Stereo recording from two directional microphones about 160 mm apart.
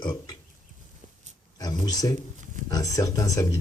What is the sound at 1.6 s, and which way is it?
Speech, 25° left (ahead or behind).